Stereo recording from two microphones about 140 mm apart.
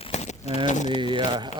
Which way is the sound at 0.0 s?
50° left (ahead or behind).